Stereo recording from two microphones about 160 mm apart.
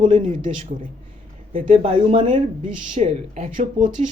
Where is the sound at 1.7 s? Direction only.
40° right (ahead or behind).